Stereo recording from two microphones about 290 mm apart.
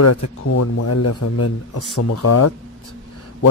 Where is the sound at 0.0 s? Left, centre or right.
Left.